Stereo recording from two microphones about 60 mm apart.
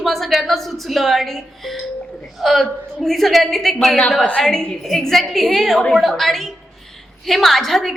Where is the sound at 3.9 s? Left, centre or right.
Centre.